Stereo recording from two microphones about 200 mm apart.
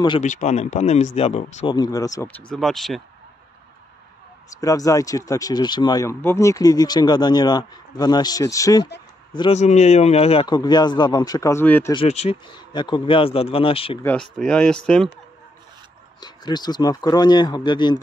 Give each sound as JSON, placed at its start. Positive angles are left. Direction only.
{"t": 0.2, "sound": "speech", "side_deg": 35}
{"t": 1.8, "sound": "speech", "side_deg": 20}
{"t": 4.5, "sound": "a man's voice", "side_deg": 15}
{"t": 9.6, "sound": "speech", "side_deg": 35}
{"t": 11.9, "sound": "speech", "side_deg": 30}
{"t": 14.3, "sound": "speech", "side_deg": 5}
{"t": 16.2, "sound": "speech", "side_deg": 20}